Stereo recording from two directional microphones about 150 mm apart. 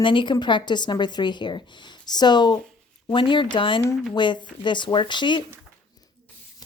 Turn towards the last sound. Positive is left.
turn(degrees=30)  # may be behind; listen again after turning